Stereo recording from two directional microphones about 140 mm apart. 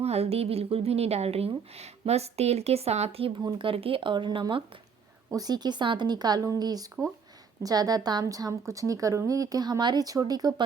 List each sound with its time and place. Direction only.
0.0 s a woman's voice: 45° right (ahead or behind); by 10.5 s 30° right (ahead or behind)